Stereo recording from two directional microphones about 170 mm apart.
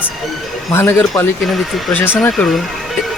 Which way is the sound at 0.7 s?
15° left (ahead or behind).